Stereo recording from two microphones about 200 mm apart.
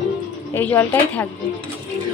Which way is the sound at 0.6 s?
10° left (ahead or behind).